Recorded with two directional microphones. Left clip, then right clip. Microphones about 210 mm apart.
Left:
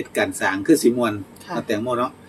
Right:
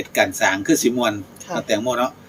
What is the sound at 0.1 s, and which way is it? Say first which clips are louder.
Speech: right 4 dB; 35° right (ahead or behind).